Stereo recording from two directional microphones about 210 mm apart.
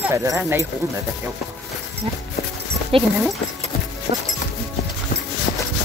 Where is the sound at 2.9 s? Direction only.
25° right (ahead or behind).